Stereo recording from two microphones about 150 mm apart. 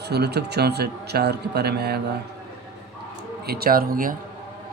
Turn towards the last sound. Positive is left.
turn(degrees=-70)  # may be behind; listen again after turning